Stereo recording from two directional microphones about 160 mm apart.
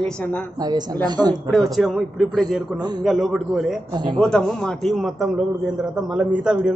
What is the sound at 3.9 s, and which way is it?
Speech, 25° right (ahead or behind).